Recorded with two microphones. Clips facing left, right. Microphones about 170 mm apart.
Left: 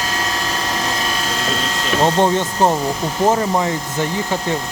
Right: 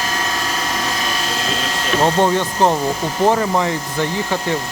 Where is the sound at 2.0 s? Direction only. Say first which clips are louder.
Even; 15° left (ahead or behind).